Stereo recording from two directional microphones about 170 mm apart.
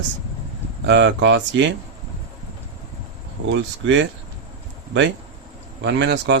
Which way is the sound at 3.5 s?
90° right.